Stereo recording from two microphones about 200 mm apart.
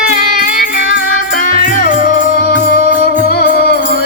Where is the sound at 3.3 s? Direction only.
55° left (ahead or behind).